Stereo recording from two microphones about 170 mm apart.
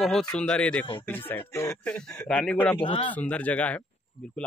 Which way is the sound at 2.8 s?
30° left (ahead or behind).